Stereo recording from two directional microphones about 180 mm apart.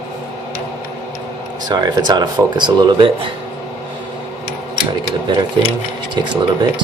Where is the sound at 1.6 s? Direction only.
25° right (ahead or behind).